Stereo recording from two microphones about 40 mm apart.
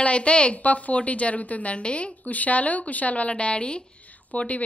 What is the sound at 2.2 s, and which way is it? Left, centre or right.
Speech, left.